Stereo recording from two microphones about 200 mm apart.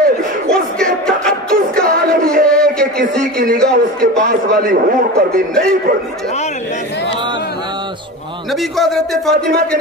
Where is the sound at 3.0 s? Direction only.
45° right (ahead or behind).